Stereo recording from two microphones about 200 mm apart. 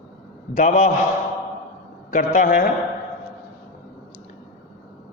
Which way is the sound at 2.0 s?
40° left (ahead or behind).